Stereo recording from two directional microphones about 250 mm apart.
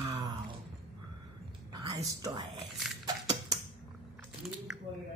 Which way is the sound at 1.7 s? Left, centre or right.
Centre.